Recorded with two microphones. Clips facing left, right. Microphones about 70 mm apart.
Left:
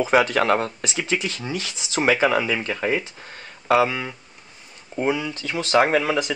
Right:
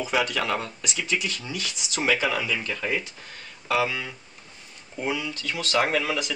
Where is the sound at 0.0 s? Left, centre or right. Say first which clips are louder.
Left 7 dB; left.